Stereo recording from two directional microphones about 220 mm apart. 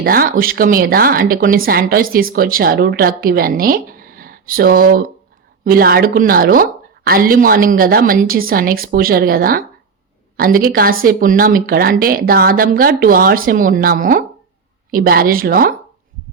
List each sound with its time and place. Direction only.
0.0 s a woman's voice: 40° right (ahead or behind)